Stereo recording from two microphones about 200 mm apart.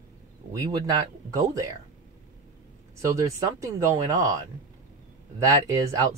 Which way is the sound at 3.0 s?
15° right (ahead or behind).